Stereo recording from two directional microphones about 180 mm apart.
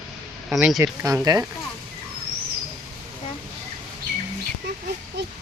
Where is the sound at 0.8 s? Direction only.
15° right (ahead or behind).